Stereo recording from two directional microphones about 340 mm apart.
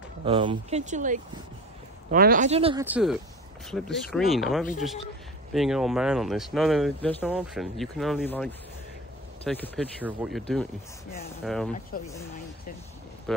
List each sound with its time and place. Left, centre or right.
0.2 s speech: centre
2.8 s speech: centre
11.4 s speech: centre
11.9 s speech: left